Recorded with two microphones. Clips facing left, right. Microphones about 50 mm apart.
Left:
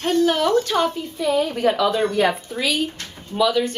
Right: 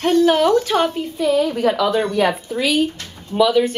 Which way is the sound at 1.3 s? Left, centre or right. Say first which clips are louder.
Right 3 dB; centre.